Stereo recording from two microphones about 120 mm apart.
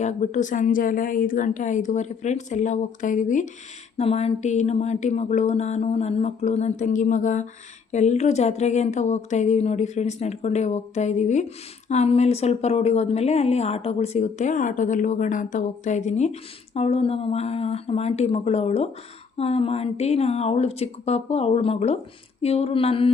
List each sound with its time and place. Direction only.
0.0 s a woman's voice: 75° left (ahead or behind)
3.9 s speech: 60° left (ahead or behind); by 7.4 s 90° left
7.9 s speech: 70° left (ahead or behind); by 21.9 s 55° left (ahead or behind)
22.4 s a sound: 55° left (ahead or behind)